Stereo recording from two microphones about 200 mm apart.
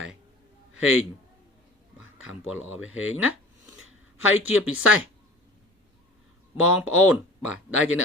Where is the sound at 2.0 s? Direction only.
85° left.